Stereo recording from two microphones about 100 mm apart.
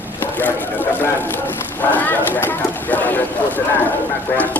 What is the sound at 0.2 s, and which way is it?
Speech, 20° left (ahead or behind).